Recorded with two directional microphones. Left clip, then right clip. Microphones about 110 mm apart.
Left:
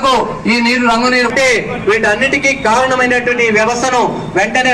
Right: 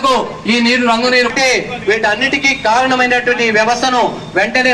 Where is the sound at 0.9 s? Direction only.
5° left (ahead or behind).